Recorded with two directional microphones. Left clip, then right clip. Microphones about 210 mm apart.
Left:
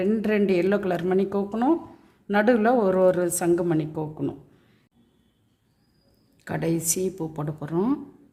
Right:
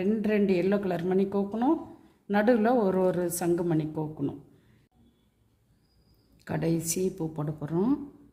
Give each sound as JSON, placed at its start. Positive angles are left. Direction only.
{"t": 0.0, "sound": "a woman's voice", "side_deg": 10}
{"t": 6.4, "sound": "speech", "side_deg": 0}